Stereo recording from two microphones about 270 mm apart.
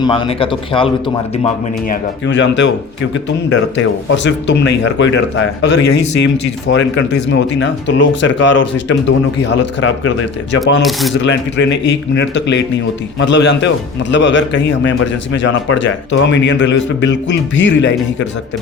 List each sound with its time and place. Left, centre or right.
0.0 s speech: centre
2.2 s a man's voice: left
3.5 s speech: left
5.8 s speech: left
6.7 s a man's voice: left